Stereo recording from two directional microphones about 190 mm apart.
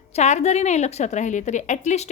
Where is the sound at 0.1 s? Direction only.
35° left (ahead or behind).